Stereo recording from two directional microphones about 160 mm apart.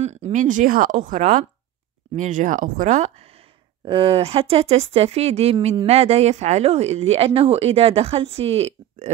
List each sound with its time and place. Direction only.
0.0 s a woman's voice: 40° right (ahead or behind)